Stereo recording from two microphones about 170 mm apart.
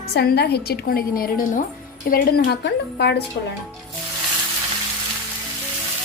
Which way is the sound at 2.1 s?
75° left (ahead or behind).